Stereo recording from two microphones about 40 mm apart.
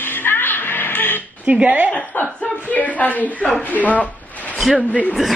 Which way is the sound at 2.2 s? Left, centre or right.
Left.